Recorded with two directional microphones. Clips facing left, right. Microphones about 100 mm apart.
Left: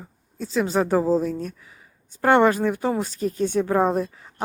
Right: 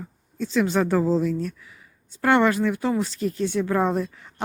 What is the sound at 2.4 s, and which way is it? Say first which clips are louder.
Speech: left 1 dB; 45° left (ahead or behind).